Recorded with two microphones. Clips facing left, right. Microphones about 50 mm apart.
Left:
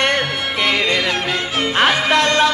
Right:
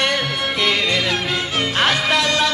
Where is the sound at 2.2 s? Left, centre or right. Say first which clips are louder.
Left 4 dB; left.